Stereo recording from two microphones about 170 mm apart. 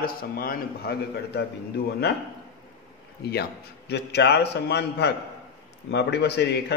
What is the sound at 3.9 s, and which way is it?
A man's voice, 75° left (ahead or behind).